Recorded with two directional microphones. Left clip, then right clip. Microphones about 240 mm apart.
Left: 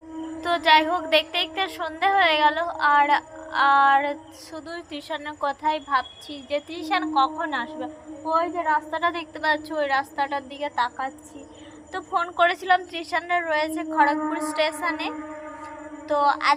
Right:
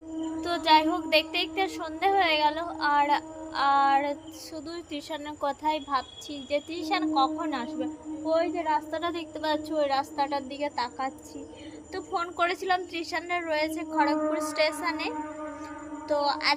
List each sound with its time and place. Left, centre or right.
0.4 s a woman's voice: centre